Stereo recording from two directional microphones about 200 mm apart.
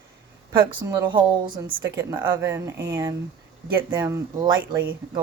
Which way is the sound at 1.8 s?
10° right (ahead or behind).